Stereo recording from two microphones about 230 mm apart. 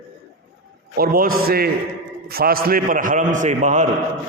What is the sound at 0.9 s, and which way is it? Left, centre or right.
A man's voice, right.